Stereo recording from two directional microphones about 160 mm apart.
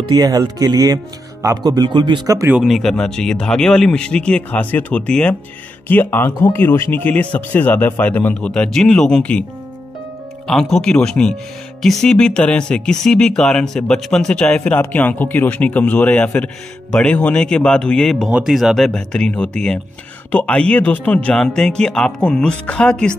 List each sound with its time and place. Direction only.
0.1 s speech: 25° right (ahead or behind)
2.5 s speech: centre (ahead or behind)
10.4 s speech: centre (ahead or behind)